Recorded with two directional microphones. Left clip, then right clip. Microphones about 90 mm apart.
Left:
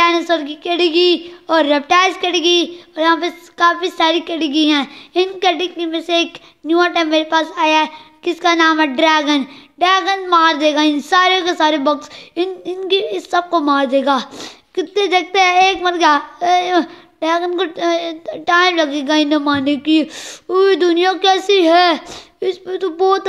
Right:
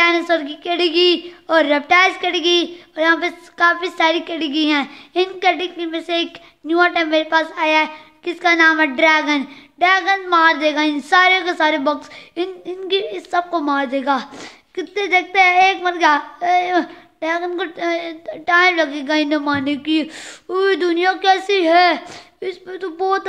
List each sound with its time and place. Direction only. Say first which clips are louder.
0.0 s speech: left 1 dB; 15° left (ahead or behind); by 23.2 s 30° left (ahead or behind)